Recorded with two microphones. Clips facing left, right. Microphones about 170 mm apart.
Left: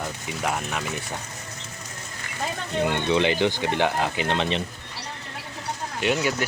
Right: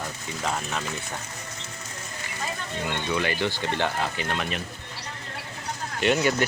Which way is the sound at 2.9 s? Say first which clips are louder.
Left 5 dB; 20° left (ahead or behind).